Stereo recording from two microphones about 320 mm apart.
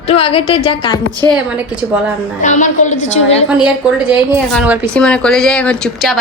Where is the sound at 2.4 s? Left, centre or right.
Left.